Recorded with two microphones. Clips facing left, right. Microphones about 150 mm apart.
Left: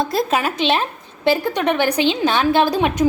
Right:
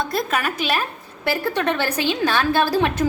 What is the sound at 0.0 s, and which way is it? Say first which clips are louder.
A woman's voice: left 4 dB; 30° left (ahead or behind).